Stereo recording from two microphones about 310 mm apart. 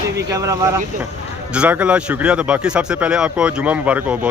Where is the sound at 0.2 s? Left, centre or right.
Centre.